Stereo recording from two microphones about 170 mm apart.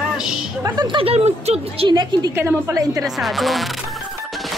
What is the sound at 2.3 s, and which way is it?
Speech, 15° right (ahead or behind).